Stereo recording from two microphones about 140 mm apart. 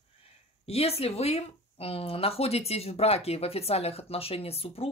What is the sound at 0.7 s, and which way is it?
Speech, 45° left (ahead or behind).